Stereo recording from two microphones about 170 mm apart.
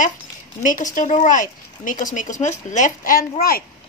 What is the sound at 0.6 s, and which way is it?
Speech, 50° left (ahead or behind).